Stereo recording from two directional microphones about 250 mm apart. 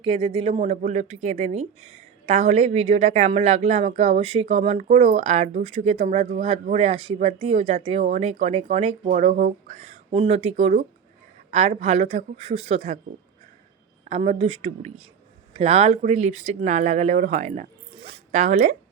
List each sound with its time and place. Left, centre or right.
0.0 s a woman's voice: right
14.0 s a woman's voice: right